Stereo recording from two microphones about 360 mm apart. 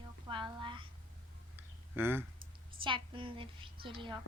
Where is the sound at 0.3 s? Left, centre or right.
Centre.